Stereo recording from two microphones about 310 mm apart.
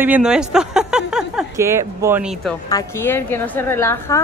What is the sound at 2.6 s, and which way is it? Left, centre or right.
A woman's voice, centre.